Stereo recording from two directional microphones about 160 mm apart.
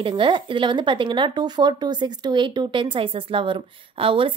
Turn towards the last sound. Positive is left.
turn(degrees=-35)  # may be behind; listen again after turning